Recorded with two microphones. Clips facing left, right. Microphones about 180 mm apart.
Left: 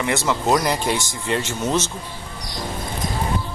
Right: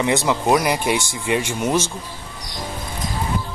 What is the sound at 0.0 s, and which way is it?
Speech, 15° right (ahead or behind).